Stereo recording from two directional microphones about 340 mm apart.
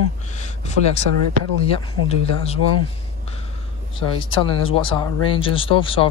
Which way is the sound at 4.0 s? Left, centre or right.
Centre.